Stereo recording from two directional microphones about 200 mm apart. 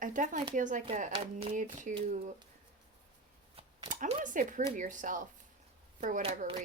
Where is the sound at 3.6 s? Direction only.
40° right (ahead or behind).